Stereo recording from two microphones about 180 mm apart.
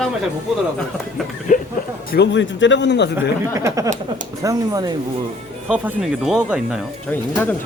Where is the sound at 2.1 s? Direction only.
75° left (ahead or behind).